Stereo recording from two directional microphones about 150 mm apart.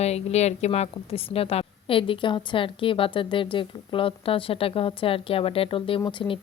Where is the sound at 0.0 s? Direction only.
45° left (ahead or behind).